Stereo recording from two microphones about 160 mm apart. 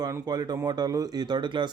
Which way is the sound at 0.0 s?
25° right (ahead or behind).